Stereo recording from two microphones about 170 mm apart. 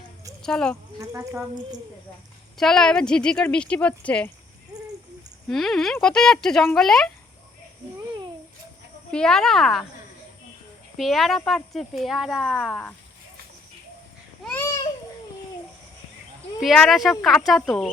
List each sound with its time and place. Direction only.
0.4 s speech: 5° left (ahead or behind)
0.9 s a woman's voice: 20° right (ahead or behind)
2.6 s speech: centre (ahead or behind)
5.5 s speech: centre (ahead or behind)
9.1 s speech: 5° left (ahead or behind)
10.9 s speech: centre (ahead or behind)
14.4 s babbling: 15° left (ahead or behind)
16.6 s speech: centre (ahead or behind)